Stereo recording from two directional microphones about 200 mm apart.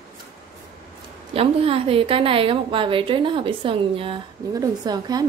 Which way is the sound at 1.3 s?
30° right (ahead or behind).